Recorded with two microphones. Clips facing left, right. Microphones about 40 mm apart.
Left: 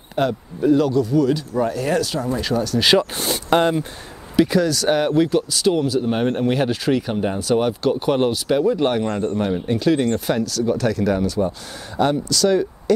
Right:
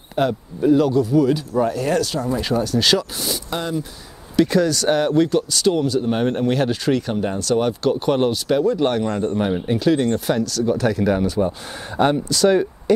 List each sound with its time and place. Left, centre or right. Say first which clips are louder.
0.1 s speech: right 1 dB; centre
2.4 s speech: right 1 dB; centre
3.0 s speech: left 4 dB; left
4.4 s speech: even; centre
9.2 s speech: right 1 dB; centre
10.9 s speech: right 1 dB; centre